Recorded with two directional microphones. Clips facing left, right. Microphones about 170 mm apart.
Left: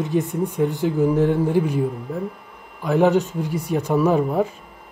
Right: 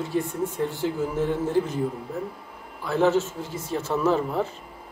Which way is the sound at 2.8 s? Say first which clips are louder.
Left 4 dB; 15° left (ahead or behind).